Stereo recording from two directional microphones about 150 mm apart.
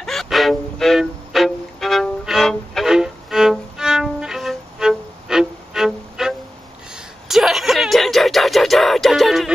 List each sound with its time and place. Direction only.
0.0 s music: centre (ahead or behind)